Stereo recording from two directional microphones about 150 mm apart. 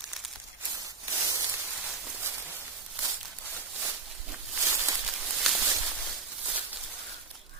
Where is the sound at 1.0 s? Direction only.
20° right (ahead or behind).